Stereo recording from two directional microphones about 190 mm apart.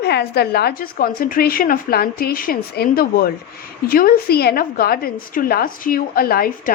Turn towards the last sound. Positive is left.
turn(degrees=50)  # may be behind; listen again after turning